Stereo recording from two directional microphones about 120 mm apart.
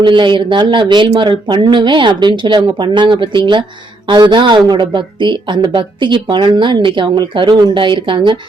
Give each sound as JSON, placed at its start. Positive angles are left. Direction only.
{"t": 0.0, "sound": "a woman's voice", "side_deg": -40}